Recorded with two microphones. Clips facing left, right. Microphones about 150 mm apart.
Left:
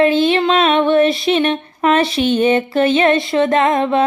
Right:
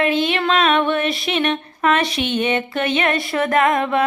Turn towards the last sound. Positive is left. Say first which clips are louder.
# left 3 dB
turn(degrees=25)  # may be behind; listen again after turning